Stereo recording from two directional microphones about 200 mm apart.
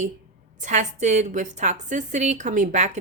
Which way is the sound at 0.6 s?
35° right (ahead or behind).